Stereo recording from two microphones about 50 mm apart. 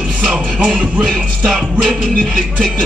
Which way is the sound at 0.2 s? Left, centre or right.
Right.